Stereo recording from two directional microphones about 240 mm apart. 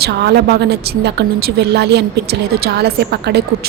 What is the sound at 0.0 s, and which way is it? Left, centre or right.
A woman's voice, right.